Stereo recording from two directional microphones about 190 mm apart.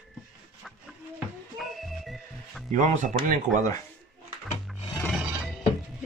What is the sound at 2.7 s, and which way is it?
Speech, 40° right (ahead or behind).